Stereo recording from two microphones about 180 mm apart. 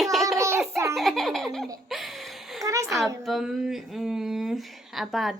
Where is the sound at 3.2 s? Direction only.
Centre (ahead or behind).